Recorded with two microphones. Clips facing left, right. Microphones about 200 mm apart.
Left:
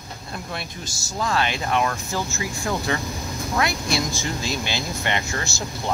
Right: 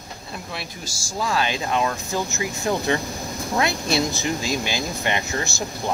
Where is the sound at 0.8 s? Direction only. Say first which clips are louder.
Right 1 dB; 10° right (ahead or behind).